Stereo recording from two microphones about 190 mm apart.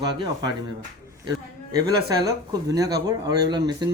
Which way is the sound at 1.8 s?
20° right (ahead or behind).